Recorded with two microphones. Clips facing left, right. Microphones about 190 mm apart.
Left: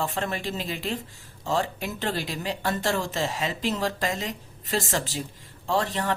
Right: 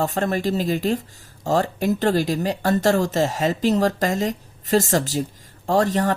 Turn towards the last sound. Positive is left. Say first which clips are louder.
# right 7 dB
turn(degrees=-45)  # may be behind; listen again after turning